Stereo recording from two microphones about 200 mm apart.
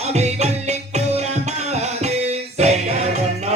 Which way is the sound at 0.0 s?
35° right (ahead or behind).